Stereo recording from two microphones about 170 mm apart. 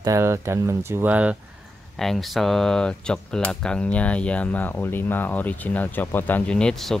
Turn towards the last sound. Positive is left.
turn(degrees=5)  # may be behind; listen again after turning